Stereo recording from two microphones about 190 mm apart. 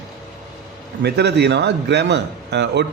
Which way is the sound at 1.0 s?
60° right (ahead or behind).